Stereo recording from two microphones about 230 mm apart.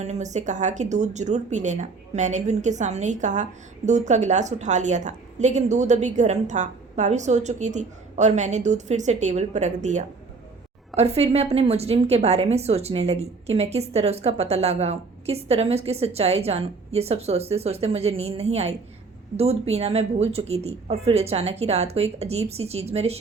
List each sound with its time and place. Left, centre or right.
0.0 s a woman's voice: right